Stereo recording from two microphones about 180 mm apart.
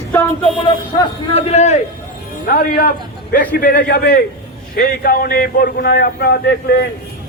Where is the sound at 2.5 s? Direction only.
55° left (ahead or behind).